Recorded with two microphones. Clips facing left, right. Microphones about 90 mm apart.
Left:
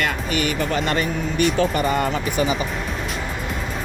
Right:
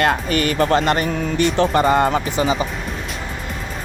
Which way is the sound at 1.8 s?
40° right (ahead or behind).